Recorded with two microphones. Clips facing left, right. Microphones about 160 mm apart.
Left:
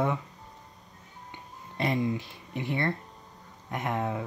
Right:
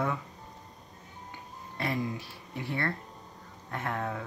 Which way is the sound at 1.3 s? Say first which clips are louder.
Even; 20° left (ahead or behind).